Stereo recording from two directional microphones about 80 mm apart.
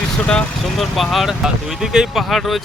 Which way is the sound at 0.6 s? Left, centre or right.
Centre.